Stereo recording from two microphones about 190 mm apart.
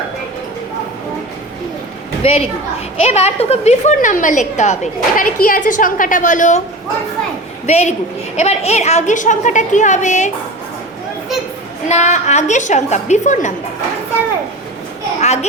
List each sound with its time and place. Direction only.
2.2 s a woman's voice: 30° left (ahead or behind)
7.7 s a woman's voice: 35° left (ahead or behind)
11.9 s a woman's voice: 40° left (ahead or behind)
15.2 s children playing: 35° left (ahead or behind)